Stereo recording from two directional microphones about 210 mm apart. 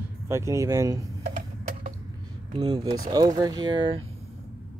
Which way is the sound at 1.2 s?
40° right (ahead or behind).